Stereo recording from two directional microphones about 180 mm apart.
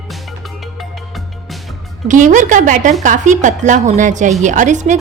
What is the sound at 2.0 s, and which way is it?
Speech, 45° right (ahead or behind).